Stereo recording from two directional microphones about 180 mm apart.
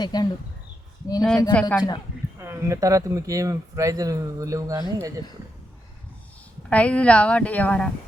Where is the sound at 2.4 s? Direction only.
15° right (ahead or behind).